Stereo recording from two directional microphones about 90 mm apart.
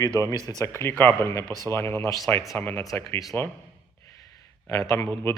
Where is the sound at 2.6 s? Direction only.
25° left (ahead or behind).